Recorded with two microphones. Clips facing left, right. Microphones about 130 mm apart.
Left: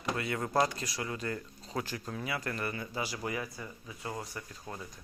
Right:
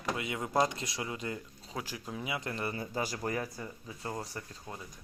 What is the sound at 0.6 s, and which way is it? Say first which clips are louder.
Speech: even; 25° right (ahead or behind).